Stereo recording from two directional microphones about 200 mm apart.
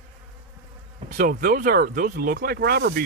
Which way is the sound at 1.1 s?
45° right (ahead or behind).